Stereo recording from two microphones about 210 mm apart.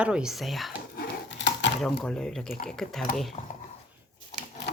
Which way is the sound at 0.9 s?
60° left (ahead or behind).